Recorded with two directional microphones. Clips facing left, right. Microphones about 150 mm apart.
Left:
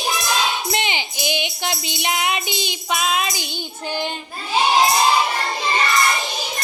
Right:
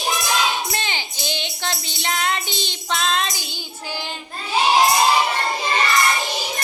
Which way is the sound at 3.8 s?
55° left (ahead or behind).